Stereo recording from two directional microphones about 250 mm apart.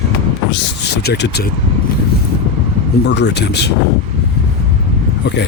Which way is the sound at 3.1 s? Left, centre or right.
Left.